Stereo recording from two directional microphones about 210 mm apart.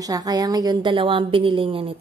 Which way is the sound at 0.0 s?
15° right (ahead or behind).